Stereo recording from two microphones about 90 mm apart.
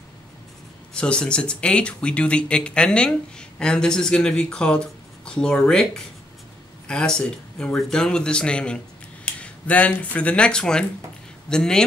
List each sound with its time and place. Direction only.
0.9 s speech: 10° left (ahead or behind)